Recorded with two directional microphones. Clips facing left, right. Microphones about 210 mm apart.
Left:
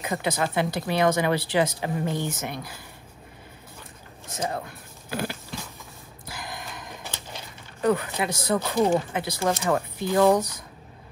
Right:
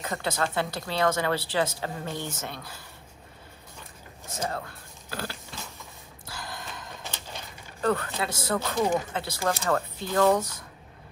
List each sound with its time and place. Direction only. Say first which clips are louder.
0.0 s speech: left 3 dB; 15° left (ahead or behind)
4.4 s music: left 2 dB; 15° left (ahead or behind)
6.2 s a sound: left 2 dB; 15° left (ahead or behind)
7.8 s speech: left 3 dB; 15° left (ahead or behind)